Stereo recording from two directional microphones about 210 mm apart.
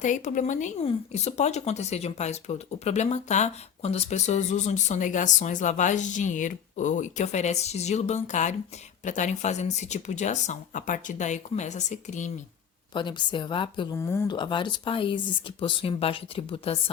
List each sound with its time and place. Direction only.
0.0 s speech: 35° left (ahead or behind)
12.9 s speech: 20° left (ahead or behind)
14.0 s speech: 10° left (ahead or behind)